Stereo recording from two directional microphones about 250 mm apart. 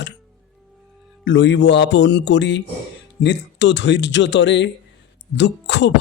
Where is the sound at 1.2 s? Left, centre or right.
Left.